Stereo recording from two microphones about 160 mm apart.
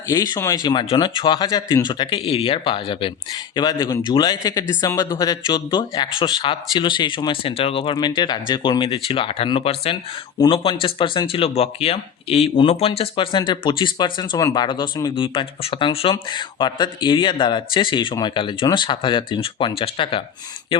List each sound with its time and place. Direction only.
0.1 s speech: 20° left (ahead or behind)